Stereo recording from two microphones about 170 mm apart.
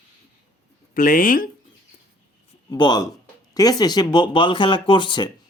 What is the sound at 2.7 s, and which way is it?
Speech, 25° left (ahead or behind).